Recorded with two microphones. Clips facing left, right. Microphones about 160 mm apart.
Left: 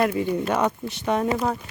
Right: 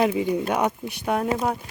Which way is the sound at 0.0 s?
10° right (ahead or behind).